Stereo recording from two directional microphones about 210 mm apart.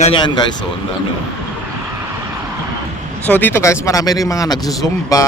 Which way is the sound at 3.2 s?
10° left (ahead or behind).